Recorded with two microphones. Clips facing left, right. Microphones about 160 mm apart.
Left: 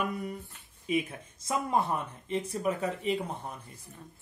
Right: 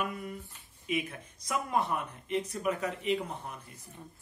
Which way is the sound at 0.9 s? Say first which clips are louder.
Left 3 dB; 35° left (ahead or behind).